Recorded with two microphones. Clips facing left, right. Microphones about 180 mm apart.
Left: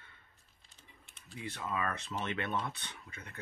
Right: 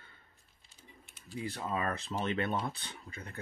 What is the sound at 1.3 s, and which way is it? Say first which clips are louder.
Speech: right 3 dB; 35° right (ahead or behind).